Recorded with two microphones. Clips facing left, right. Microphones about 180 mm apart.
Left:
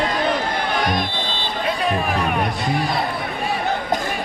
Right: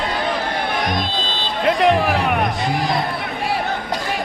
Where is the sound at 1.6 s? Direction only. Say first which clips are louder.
Right 7 dB; 80° right.